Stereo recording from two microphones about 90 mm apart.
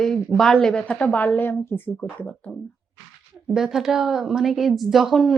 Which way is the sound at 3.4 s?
5° right (ahead or behind).